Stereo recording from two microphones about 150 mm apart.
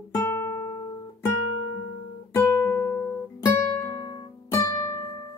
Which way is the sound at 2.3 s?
15° left (ahead or behind).